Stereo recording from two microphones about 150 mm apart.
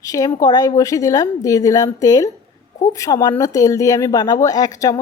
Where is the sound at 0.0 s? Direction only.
25° left (ahead or behind).